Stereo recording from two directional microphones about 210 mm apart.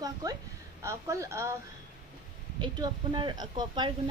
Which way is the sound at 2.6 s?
20° right (ahead or behind).